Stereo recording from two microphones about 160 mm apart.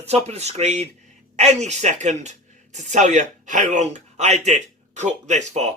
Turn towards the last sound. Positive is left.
turn(degrees=-45)  # may be behind; listen again after turning